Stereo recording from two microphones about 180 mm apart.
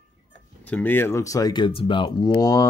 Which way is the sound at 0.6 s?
10° left (ahead or behind).